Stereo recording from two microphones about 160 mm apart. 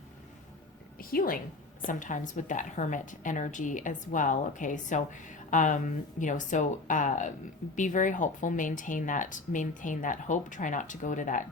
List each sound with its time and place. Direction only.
0.9 s a woman's voice: 65° left (ahead or behind)
1.9 s a woman's voice: 55° left (ahead or behind)